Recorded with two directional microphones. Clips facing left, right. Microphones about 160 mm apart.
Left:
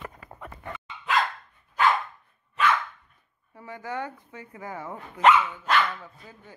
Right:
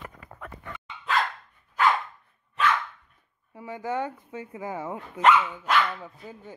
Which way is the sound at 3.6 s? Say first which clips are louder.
Right 4 dB; 20° right (ahead or behind).